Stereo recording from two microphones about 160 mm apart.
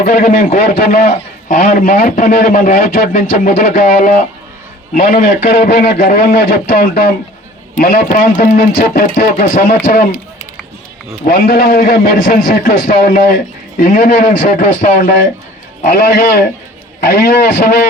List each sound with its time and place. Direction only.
0.0 s a man's voice: 55° left (ahead or behind)
11.3 s a man's voice: 70° left (ahead or behind)